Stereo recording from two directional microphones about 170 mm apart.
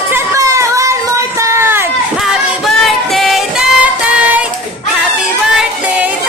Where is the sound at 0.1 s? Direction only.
20° right (ahead or behind).